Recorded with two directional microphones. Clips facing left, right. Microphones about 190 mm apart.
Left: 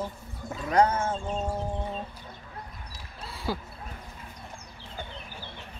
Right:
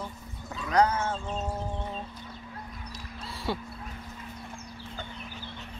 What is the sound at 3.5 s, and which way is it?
Speech, centre (ahead or behind).